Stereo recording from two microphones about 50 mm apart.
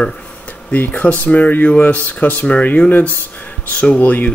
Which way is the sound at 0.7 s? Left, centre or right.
Left.